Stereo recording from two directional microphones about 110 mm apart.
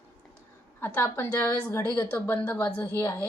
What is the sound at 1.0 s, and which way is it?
Speech, 25° left (ahead or behind).